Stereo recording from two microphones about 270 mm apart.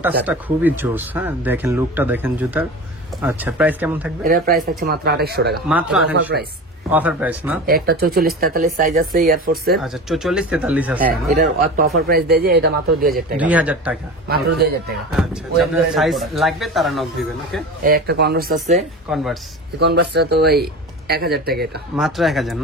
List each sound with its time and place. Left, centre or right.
0.2 s speech: centre
4.2 s speech: right
5.7 s speech: centre
7.6 s speech: right
9.8 s speech: centre
11.3 s speech: right
13.4 s speech: centre
14.2 s speech: right
15.1 s speech: centre
17.8 s speech: right
19.0 s speech: centre
19.8 s speech: right
21.9 s speech: centre